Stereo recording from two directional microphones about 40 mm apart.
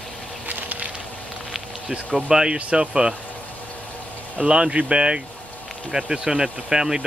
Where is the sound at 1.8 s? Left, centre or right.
Centre.